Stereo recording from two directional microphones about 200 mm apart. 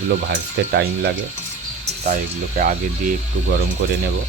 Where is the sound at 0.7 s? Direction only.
55° right (ahead or behind).